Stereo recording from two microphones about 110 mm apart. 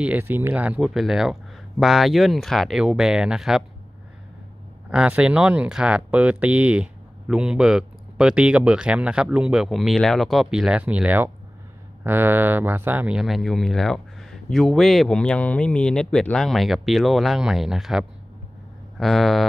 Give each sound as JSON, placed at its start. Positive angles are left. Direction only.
{"t": 0.0, "sound": "speech", "side_deg": -15}
{"t": 0.7, "sound": "speech", "side_deg": 0}
{"t": 4.8, "sound": "speech", "side_deg": -10}